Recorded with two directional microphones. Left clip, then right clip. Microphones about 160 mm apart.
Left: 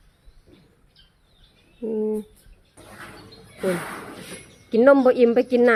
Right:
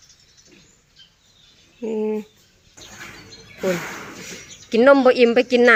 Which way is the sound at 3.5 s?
5° right (ahead or behind).